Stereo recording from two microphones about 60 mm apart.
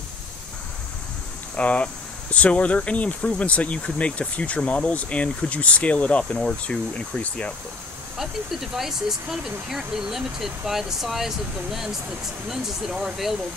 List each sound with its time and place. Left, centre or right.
1.6 s speech: left
8.2 s speech: centre